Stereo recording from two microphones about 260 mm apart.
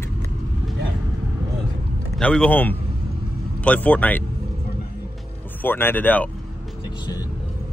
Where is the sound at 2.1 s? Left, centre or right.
Centre.